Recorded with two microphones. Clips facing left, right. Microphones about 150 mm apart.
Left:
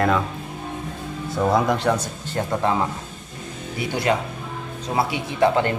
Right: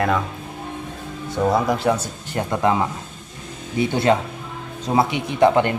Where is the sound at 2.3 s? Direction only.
15° right (ahead or behind).